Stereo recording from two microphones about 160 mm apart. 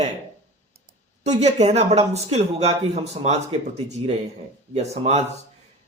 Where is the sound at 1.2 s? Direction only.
45° right (ahead or behind).